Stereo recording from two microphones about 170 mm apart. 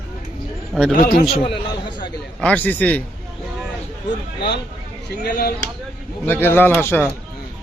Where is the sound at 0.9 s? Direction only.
55° left (ahead or behind).